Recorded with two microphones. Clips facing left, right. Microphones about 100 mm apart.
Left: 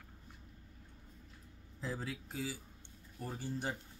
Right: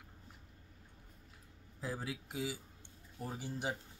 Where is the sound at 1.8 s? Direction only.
10° right (ahead or behind).